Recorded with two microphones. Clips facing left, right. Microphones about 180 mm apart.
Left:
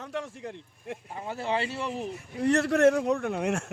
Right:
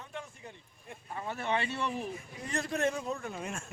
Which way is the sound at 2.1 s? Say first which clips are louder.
Left 13 dB; 75° left (ahead or behind).